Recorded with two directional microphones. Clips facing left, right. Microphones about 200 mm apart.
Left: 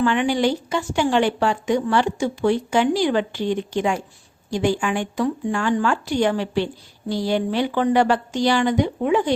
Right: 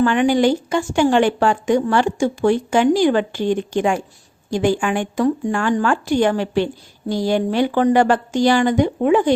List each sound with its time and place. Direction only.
0.0 s a woman's voice: 45° right (ahead or behind)